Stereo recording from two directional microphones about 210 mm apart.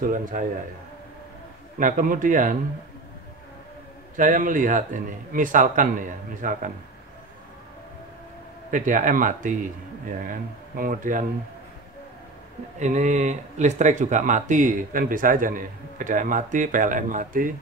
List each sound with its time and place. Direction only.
0.0 s speech: 40° right (ahead or behind)
1.8 s speech: 40° right (ahead or behind)
4.2 s speech: 40° right (ahead or behind)
8.6 s speech: 40° right (ahead or behind)
12.7 s speech: 35° right (ahead or behind)